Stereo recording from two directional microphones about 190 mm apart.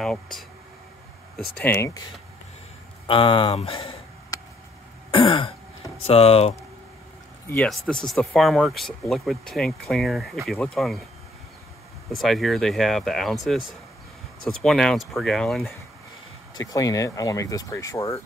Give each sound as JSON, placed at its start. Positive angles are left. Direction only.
{"t": 0.0, "sound": "speech", "side_deg": 0}
{"t": 1.5, "sound": "speech", "side_deg": 10}
{"t": 3.1, "sound": "speech", "side_deg": 25}
{"t": 4.3, "sound": "a sound", "side_deg": 20}
{"t": 5.1, "sound": "throat clearing", "side_deg": 25}
{"t": 7.4, "sound": "speech", "side_deg": 5}
{"t": 12.1, "sound": "speech", "side_deg": 0}
{"t": 16.5, "sound": "speech", "side_deg": 20}